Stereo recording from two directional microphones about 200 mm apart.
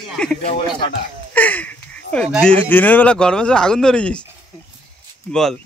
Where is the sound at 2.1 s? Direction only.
5° left (ahead or behind).